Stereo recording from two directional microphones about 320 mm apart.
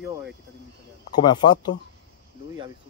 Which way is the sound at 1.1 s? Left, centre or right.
Centre.